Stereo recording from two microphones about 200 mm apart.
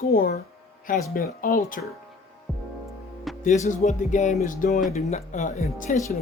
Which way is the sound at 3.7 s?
35° left (ahead or behind).